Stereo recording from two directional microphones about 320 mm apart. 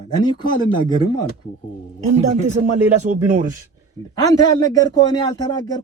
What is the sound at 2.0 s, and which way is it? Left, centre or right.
Speech, right.